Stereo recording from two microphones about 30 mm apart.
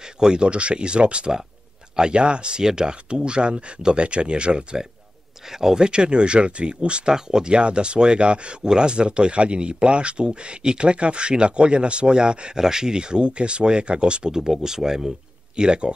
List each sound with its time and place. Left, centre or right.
0.2 s speech: right
2.6 s speech: right
5.5 s speech: centre
5.9 s speech: right
7.1 s speech: right
7.5 s speech: right
12.1 s speech: right
14.3 s speech: centre